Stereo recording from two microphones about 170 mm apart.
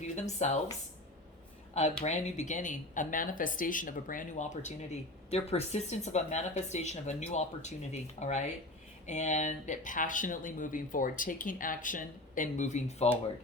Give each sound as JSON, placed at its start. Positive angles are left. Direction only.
{"t": 0.2, "sound": "speech", "side_deg": 40}
{"t": 2.0, "sound": "speech", "side_deg": 40}